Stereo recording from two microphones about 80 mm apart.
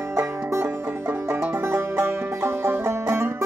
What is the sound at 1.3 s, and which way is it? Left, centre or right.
Music, right.